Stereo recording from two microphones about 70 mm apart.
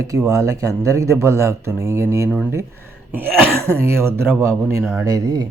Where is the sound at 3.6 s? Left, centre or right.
Right.